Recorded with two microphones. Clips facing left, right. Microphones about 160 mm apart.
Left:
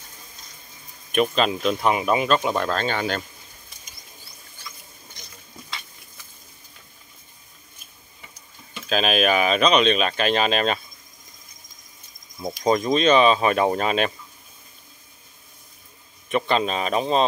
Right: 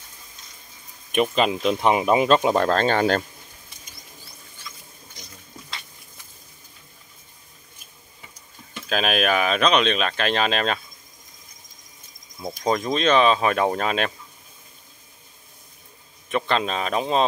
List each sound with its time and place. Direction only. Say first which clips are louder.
1.1 s speech: even; 15° right (ahead or behind); by 3.3 s 40° right (ahead or behind)
8.8 s speech: left 1 dB; centre (ahead or behind)
12.6 s speech: left 3 dB; centre (ahead or behind)
16.3 s speech: left 1 dB; 5° left (ahead or behind)